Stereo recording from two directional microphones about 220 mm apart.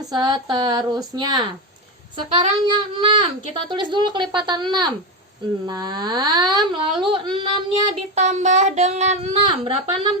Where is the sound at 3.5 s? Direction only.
20° right (ahead or behind).